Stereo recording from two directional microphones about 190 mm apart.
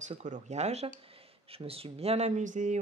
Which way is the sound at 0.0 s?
40° right (ahead or behind).